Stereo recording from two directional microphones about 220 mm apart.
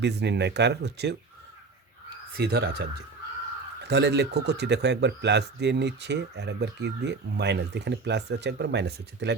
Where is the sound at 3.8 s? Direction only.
50° right (ahead or behind).